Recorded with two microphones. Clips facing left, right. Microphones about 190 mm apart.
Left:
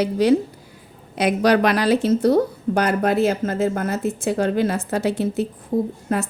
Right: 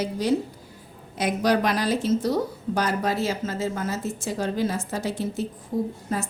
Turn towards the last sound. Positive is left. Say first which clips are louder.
# left 5 dB
turn(degrees=60)  # may be behind; listen again after turning